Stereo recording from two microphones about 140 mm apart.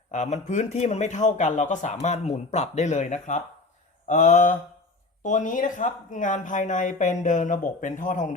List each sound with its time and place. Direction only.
0.1 s speech: 60° left (ahead or behind)